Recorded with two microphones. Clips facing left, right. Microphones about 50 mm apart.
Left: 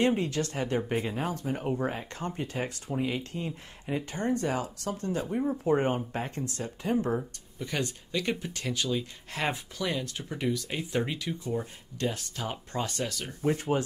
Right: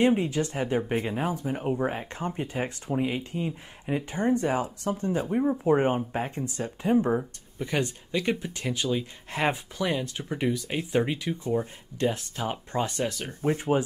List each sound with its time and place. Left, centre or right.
0.0 s speech: centre
13.3 s speech: right
13.6 s speech: centre